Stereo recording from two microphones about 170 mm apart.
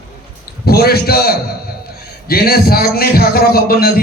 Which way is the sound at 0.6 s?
65° left (ahead or behind).